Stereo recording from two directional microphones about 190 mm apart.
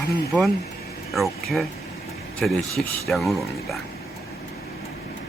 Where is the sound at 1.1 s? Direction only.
Centre (ahead or behind).